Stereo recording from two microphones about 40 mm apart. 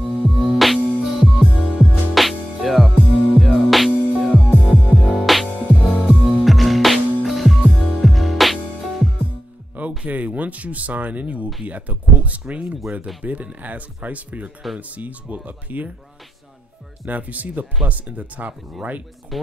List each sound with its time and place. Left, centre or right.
0.2 s music: centre
9.8 s a sound: right
11.6 s speech: right
17.0 s speech: right
19.3 s speech: centre